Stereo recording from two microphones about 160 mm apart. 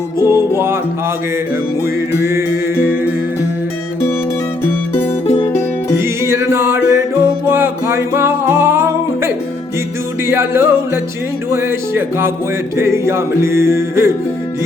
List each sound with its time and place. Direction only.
0.3 s music: 15° right (ahead or behind)
1.8 s music: 15° right (ahead or behind)
5.2 s music: 35° left (ahead or behind)
6.0 s music: 15° right (ahead or behind)